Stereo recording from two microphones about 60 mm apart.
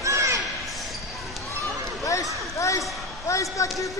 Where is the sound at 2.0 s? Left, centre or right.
Left.